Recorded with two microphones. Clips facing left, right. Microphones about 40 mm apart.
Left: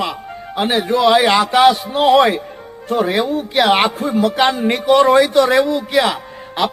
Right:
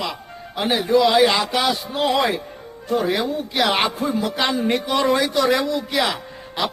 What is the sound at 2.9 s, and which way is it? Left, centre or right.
Speech, centre.